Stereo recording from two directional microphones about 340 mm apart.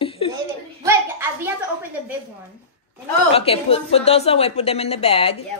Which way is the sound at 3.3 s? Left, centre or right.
Centre.